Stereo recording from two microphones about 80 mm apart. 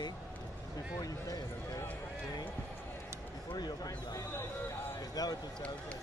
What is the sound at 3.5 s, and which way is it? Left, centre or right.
Speech, left.